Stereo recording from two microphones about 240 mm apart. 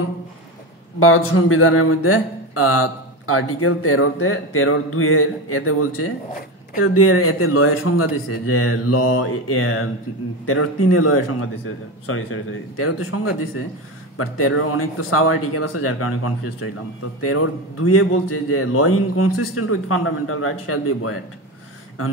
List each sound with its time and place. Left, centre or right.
0.9 s speech: left
17.2 s speech: left